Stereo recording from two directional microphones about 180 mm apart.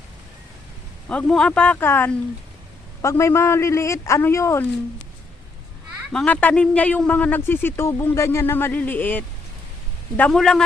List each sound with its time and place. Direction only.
1.0 s a man's voice: 5° left (ahead or behind)
6.1 s a man's voice: 10° left (ahead or behind)